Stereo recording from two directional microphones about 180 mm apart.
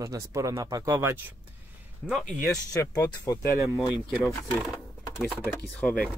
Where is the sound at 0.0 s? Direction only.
15° right (ahead or behind).